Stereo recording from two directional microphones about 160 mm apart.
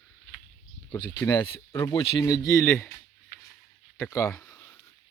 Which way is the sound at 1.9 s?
25° left (ahead or behind).